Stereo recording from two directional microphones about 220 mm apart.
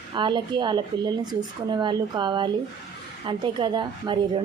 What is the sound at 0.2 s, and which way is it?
A woman's voice, 20° right (ahead or behind).